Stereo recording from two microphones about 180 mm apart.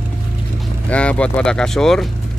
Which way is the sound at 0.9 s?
5° left (ahead or behind).